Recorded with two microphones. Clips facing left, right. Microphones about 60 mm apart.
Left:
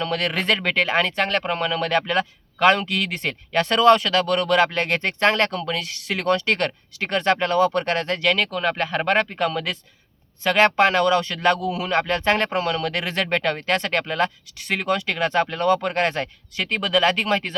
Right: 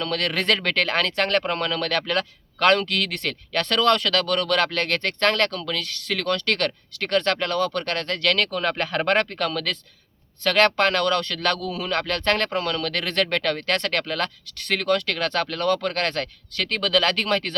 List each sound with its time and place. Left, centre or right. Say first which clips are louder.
0.0 s speech: left 1 dB; centre